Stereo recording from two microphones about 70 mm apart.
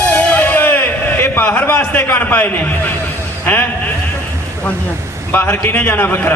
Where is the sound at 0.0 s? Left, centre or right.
Centre.